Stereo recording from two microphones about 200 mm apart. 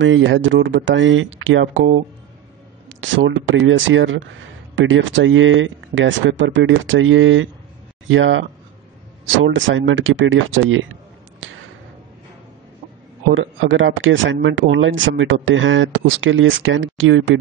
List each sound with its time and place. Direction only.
0.0 s speech: 65° right (ahead or behind)
13.3 s speech: 75° right (ahead or behind)